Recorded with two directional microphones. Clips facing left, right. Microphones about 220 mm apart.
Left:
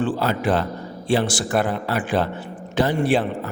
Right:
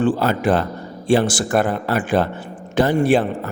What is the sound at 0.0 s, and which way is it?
A man's voice, 50° right (ahead or behind).